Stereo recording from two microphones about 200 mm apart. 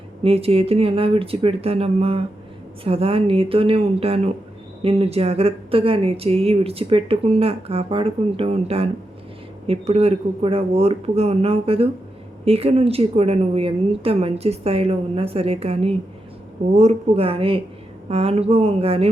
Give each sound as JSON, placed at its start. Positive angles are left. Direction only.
{"t": 0.2, "sound": "speech", "side_deg": -30}